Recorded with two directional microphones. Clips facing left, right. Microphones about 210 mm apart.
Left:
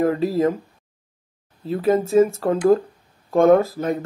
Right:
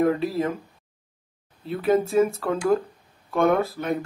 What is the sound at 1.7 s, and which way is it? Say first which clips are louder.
Speech: left 3 dB; 40° left (ahead or behind).